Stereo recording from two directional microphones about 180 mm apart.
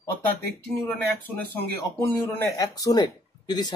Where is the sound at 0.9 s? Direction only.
10° left (ahead or behind).